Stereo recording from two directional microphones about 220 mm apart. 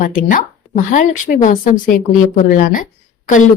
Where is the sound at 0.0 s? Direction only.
40° left (ahead or behind).